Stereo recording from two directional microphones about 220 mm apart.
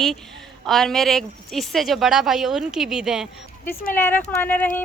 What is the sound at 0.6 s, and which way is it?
Speech, centre (ahead or behind).